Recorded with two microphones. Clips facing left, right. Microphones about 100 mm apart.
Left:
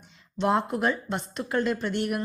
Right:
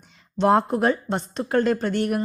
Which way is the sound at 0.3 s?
40° right (ahead or behind).